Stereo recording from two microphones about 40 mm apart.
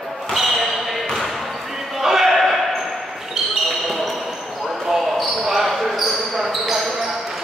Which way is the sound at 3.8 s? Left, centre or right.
Centre.